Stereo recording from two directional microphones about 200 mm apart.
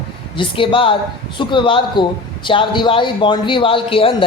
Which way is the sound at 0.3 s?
25° left (ahead or behind).